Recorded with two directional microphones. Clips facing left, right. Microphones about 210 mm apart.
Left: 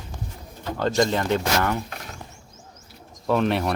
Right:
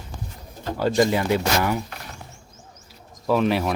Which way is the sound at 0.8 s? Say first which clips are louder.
Right 2 dB; 10° right (ahead or behind).